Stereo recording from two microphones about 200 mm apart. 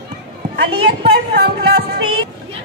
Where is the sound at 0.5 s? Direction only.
55° right (ahead or behind).